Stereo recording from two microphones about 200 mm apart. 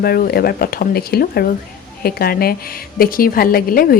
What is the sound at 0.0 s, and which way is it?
A woman's voice, 50° left (ahead or behind).